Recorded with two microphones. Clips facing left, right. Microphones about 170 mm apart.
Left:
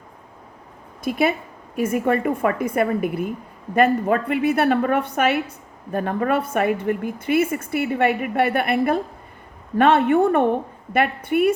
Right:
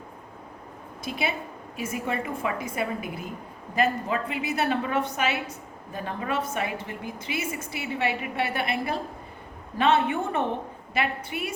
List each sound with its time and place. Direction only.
1.0 s a woman's voice: 50° left (ahead or behind)